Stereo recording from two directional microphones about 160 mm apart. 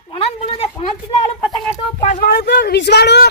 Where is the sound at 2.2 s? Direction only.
85° left.